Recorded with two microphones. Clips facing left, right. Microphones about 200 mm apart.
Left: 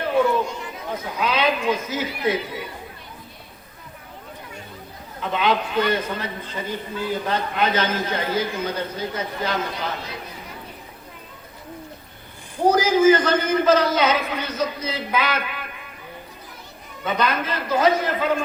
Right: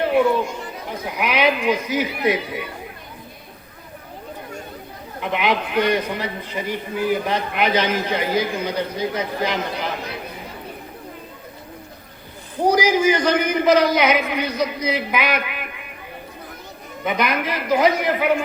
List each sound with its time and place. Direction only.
1.0 s a man's voice: 15° right (ahead or behind)
5.2 s a man's voice: 15° right (ahead or behind)
12.6 s a man's voice: 15° right (ahead or behind)
17.0 s a man's voice: 15° right (ahead or behind)